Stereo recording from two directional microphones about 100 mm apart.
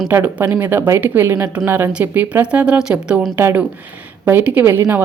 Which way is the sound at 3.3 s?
20° right (ahead or behind).